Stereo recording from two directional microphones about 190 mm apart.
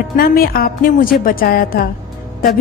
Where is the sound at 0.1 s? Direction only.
50° left (ahead or behind).